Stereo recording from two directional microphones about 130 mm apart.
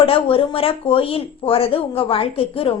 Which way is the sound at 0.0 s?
45° left (ahead or behind).